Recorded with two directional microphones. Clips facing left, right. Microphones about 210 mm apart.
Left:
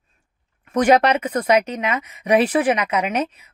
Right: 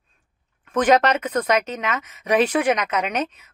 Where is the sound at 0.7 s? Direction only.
10° left (ahead or behind).